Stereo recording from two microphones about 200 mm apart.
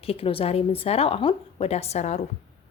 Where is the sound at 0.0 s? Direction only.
30° left (ahead or behind).